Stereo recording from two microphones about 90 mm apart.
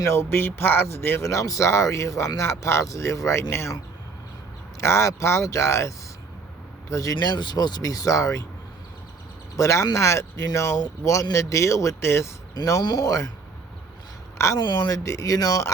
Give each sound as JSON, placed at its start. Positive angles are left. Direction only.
{"t": 0.0, "sound": "a man's voice", "side_deg": 30}
{"t": 4.8, "sound": "speech", "side_deg": 35}
{"t": 6.9, "sound": "speech", "side_deg": 40}
{"t": 9.6, "sound": "speech", "side_deg": 35}
{"t": 12.5, "sound": "speech", "side_deg": 45}
{"t": 14.3, "sound": "speech", "side_deg": 35}
{"t": 14.6, "sound": "speech", "side_deg": 55}